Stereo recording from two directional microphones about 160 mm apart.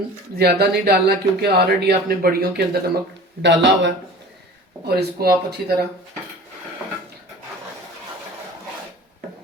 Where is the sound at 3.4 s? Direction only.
90° right.